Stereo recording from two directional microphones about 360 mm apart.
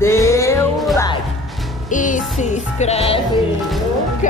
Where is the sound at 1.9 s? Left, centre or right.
Left.